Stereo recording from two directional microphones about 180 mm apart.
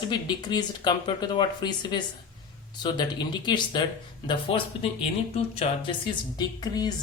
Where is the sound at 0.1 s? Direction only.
25° left (ahead or behind).